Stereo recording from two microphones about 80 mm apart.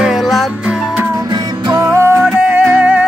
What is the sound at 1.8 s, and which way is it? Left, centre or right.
Music, right.